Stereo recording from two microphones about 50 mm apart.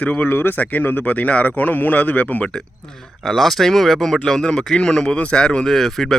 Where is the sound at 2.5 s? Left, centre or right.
Centre.